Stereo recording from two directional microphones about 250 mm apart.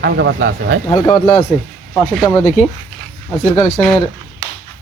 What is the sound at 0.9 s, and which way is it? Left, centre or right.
Speech, centre.